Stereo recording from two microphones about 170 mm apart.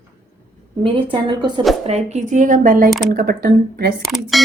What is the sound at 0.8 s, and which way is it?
Speech, 30° right (ahead or behind).